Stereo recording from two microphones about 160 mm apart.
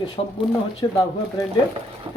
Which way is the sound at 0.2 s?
40° left (ahead or behind).